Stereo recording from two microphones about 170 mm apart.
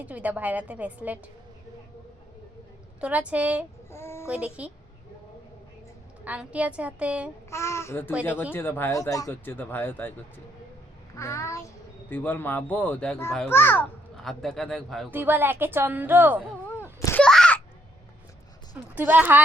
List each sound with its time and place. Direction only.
0.0 s a woman's voice: 10° right (ahead or behind)
3.0 s a woman's voice: 10° right (ahead or behind)
3.9 s child singing: 15° left (ahead or behind)
4.3 s a woman's voice: 10° right (ahead or behind)
6.2 s a woman's voice: 5° right (ahead or behind)
7.5 s speech: 15° left (ahead or behind)
11.2 s a child's voice: 15° left (ahead or behind); by 15.1 s centre (ahead or behind)
15.1 s a woman's voice: 10° right (ahead or behind)
17.0 s wail: 15° left (ahead or behind)
17.2 s a sound: 5° left (ahead or behind)
18.9 s a woman's voice: 10° right (ahead or behind)